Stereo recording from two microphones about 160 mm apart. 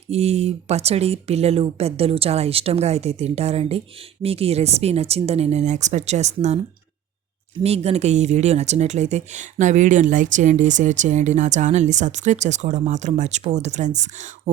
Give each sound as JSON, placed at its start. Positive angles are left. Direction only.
{"t": 0.1, "sound": "speech", "side_deg": -40}